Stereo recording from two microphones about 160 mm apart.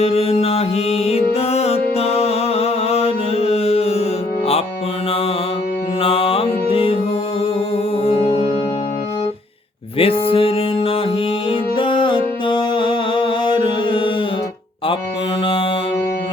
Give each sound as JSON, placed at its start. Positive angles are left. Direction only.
{"t": 0.0, "sound": "music", "side_deg": 40}
{"t": 6.0, "sound": "music", "side_deg": 35}
{"t": 8.0, "sound": "music", "side_deg": 35}
{"t": 10.0, "sound": "music", "side_deg": 35}